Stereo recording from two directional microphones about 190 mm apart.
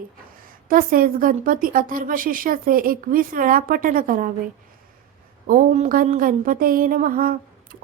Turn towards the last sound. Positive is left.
turn(degrees=-50)  # may be behind; listen again after turning